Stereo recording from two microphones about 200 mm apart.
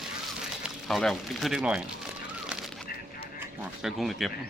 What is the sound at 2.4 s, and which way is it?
Bird, 5° right (ahead or behind).